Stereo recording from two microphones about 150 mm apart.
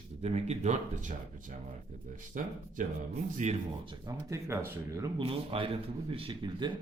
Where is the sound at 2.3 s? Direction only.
55° right (ahead or behind).